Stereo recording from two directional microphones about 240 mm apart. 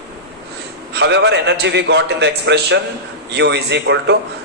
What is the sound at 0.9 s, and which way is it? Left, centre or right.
A man's voice, right.